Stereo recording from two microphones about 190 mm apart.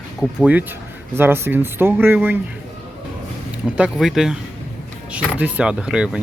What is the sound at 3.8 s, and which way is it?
Speech, 5° right (ahead or behind).